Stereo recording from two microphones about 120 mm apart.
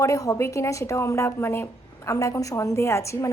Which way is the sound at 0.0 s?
25° left (ahead or behind).